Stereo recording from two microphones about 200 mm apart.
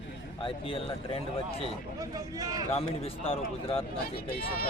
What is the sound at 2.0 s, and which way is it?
Speech, 20° right (ahead or behind).